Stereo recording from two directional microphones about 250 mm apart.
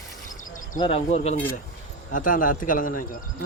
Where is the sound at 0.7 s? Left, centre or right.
Left.